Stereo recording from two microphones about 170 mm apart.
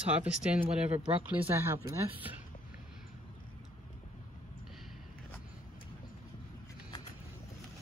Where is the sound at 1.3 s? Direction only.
10° right (ahead or behind).